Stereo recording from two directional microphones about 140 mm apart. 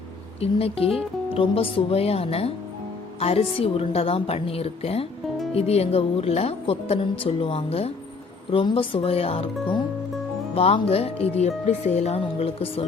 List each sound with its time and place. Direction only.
0.3 s a woman's voice: 45° left (ahead or behind)